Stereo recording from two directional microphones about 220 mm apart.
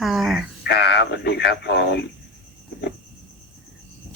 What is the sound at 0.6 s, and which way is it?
Speech, 50° left (ahead or behind).